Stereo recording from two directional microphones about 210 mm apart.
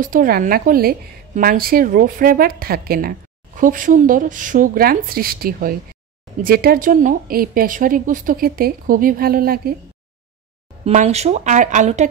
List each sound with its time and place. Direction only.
0.0 s a woman's voice: 40° right (ahead or behind)
10.9 s speech: 30° right (ahead or behind)